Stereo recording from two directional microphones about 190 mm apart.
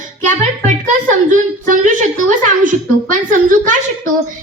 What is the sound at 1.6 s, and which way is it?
A woman's voice, 45° right (ahead or behind).